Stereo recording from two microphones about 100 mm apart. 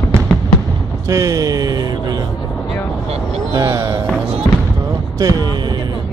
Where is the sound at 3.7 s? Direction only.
35° right (ahead or behind).